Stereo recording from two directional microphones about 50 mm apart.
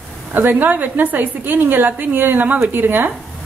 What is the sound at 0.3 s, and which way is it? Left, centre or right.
A woman's voice, right.